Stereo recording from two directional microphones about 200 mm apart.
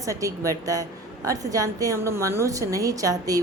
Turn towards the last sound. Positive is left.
turn(degrees=-20)  # may be behind; listen again after turning